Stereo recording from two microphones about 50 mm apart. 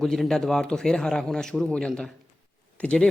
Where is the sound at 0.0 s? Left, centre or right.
Centre.